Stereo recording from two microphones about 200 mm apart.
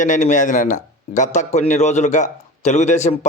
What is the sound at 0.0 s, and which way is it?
Speech, 40° left (ahead or behind).